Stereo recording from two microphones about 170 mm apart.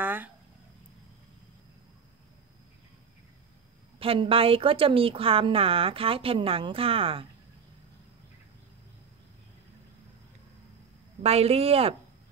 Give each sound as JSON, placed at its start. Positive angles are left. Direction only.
{"t": 0.0, "sound": "a sound", "side_deg": -10}
{"t": 4.0, "sound": "a woman's voice", "side_deg": -35}
{"t": 11.2, "sound": "a woman's voice", "side_deg": -35}